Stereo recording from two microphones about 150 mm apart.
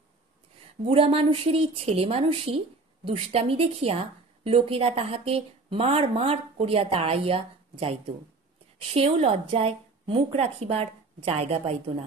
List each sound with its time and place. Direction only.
0.8 s a woman's voice: 40° right (ahead or behind)